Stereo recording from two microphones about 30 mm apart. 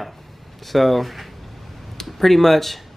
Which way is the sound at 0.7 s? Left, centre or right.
Centre.